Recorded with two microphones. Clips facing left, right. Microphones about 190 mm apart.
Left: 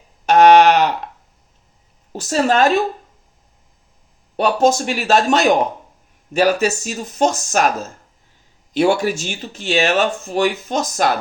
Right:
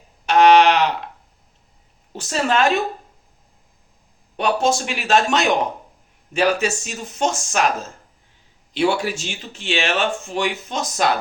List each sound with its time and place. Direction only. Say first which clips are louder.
0.3 s a sound: left 3 dB; 45° left (ahead or behind)
2.1 s speech: left 4 dB; 40° left (ahead or behind)
4.4 s speech: left 4 dB; 40° left (ahead or behind)
8.7 s speech: left 4 dB; 45° left (ahead or behind)